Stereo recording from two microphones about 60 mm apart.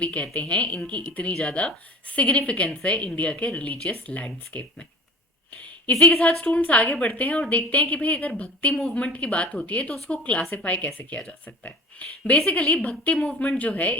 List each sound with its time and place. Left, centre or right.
0.0 s speech: left
1.3 s speech: centre
1.5 s speech: left
4.5 s speech: left
5.9 s speech: left
8.7 s speech: centre